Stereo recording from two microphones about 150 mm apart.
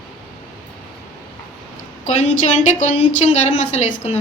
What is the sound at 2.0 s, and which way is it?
A woman's voice, 50° left (ahead or behind).